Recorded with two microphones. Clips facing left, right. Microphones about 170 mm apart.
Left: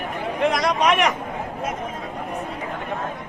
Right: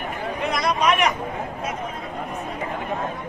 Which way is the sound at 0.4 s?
90° left.